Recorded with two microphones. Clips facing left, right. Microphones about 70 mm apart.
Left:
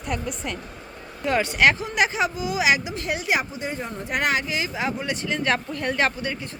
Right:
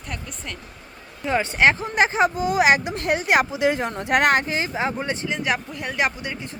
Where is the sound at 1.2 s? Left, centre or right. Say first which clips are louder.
Right 1 dB; right.